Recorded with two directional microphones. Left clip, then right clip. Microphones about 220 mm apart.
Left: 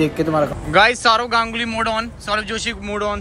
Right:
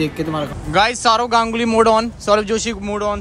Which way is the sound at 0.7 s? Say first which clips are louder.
Left 1 dB; 10° right (ahead or behind).